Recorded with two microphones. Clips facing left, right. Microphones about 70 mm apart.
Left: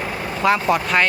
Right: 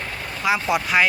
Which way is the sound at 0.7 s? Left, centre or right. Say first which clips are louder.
Left 1 dB; centre.